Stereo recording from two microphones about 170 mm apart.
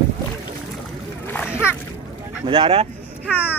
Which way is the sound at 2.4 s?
30° right (ahead or behind).